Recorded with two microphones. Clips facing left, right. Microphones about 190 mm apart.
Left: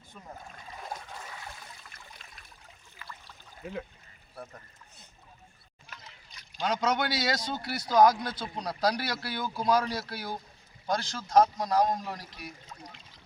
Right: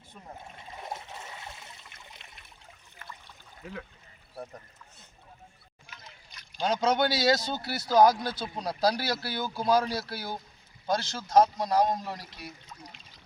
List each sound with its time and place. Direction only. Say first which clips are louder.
0.3 s trickle: right 1 dB; 25° right (ahead or behind)
6.6 s speech: right 3 dB; 30° right (ahead or behind)